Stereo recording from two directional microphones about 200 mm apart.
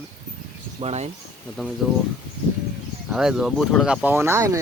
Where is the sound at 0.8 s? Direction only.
35° right (ahead or behind).